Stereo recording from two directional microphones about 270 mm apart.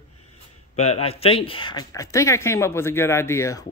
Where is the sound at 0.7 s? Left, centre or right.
Left.